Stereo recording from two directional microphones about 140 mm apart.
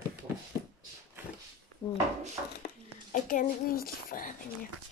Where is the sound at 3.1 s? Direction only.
70° left (ahead or behind).